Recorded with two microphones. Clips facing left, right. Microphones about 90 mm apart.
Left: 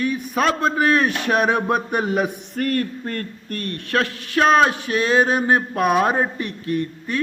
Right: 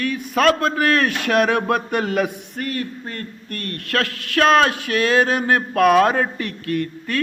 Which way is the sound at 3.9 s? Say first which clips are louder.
Left 1 dB; 25° left (ahead or behind).